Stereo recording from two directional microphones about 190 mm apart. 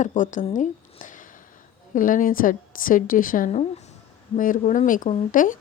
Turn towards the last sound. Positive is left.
turn(degrees=45)  # may be behind; listen again after turning